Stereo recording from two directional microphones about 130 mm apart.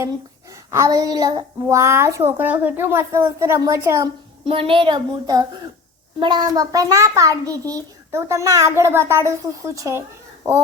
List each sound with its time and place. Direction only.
0.5 s a child's voice: 25° right (ahead or behind)
4.4 s a child's voice: 45° right (ahead or behind); by 10.0 s 25° right (ahead or behind)